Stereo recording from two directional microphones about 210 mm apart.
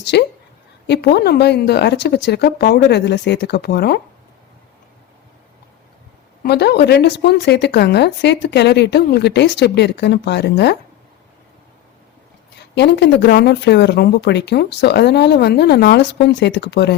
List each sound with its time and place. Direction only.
0.0 s a woman's voice: 55° left (ahead or behind)
6.4 s speech: 50° left (ahead or behind)
12.7 s speech: 55° left (ahead or behind)